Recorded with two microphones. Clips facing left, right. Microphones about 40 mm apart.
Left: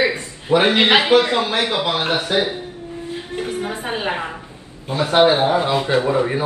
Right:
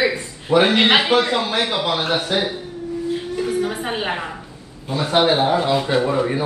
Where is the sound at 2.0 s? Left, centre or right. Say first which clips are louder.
Left 1 dB; left.